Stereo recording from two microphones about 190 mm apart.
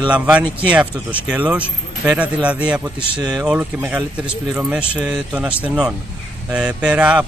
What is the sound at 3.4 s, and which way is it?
Speech, 5° right (ahead or behind).